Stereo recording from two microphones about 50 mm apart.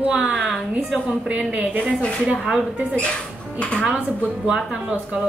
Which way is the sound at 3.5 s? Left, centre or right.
Left.